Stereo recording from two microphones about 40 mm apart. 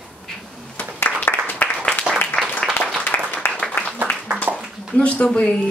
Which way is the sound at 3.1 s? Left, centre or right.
Left.